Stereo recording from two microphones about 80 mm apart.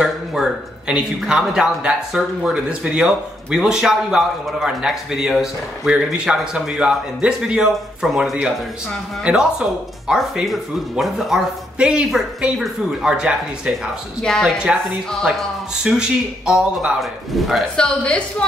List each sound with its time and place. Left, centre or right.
0.0 s a man's voice: centre
14.2 s speech: centre
15.2 s speech: centre
17.7 s a woman's voice: centre